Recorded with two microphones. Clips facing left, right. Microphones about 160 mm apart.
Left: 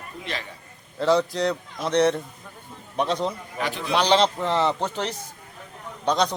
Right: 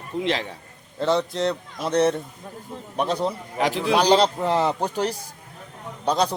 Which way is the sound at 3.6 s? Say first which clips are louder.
Right 7 dB; 90° right.